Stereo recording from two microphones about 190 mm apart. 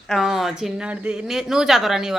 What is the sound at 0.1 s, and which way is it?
Speech, centre (ahead or behind).